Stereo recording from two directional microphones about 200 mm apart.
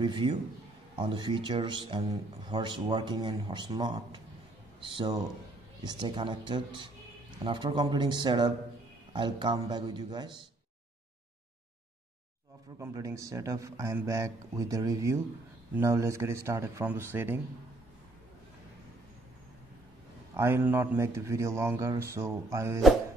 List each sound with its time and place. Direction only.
0.0 s a man's voice: 20° right (ahead or behind)
12.7 s speech: 15° right (ahead or behind)
20.3 s speech: 10° right (ahead or behind)